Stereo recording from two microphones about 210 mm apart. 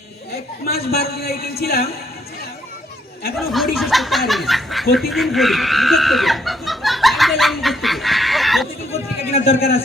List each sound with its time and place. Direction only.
0.6 s a man's voice: 45° left (ahead or behind)
3.3 s speech: centre (ahead or behind)
4.9 s snicker: centre (ahead or behind)
9.4 s a man's voice: 45° left (ahead or behind)